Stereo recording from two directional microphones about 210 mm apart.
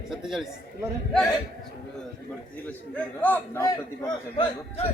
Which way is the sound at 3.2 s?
10° left (ahead or behind).